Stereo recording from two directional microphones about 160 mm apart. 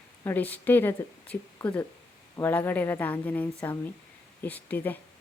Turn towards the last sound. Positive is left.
turn(degrees=10)  # may be behind; listen again after turning